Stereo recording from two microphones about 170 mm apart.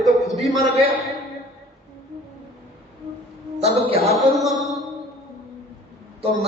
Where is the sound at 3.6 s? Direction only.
40° right (ahead or behind).